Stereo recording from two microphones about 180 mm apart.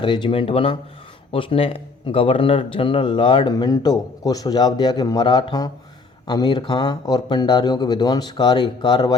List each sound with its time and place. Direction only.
0.0 s speech: 25° left (ahead or behind)